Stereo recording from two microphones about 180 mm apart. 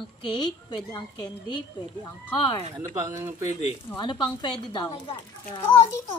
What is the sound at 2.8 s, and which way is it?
Speech, 15° right (ahead or behind).